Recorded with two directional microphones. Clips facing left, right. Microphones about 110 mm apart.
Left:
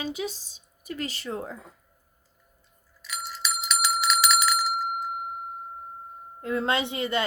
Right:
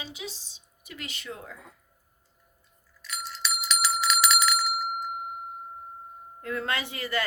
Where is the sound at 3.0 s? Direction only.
10° left (ahead or behind).